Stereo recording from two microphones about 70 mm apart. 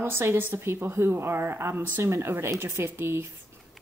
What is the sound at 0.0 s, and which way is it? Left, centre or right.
A woman's voice, right.